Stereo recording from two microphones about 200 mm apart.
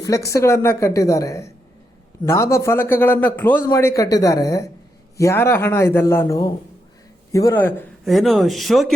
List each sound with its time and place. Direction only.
0.0 s a man's voice: 15° left (ahead or behind)
8.0 s speech: centre (ahead or behind)